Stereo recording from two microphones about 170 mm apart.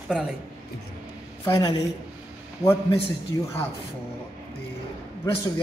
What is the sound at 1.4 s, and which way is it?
Speech, 25° left (ahead or behind).